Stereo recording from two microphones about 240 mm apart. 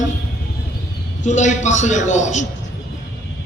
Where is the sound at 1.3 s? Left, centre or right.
Left.